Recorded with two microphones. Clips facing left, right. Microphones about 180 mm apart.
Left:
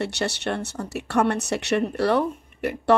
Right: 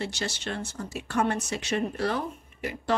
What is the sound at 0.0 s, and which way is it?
Speech, 65° left (ahead or behind).